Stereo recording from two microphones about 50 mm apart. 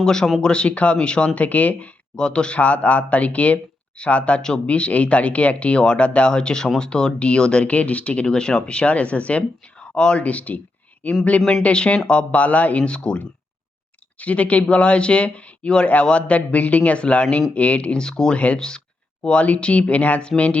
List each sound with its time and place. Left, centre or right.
0.0 s speech: centre; by 2.0 s left
2.1 s speech: centre
14.2 s speech: left